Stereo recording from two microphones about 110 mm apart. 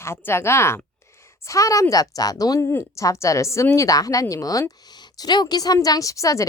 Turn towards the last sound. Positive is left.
turn(degrees=30)  # may be behind; listen again after turning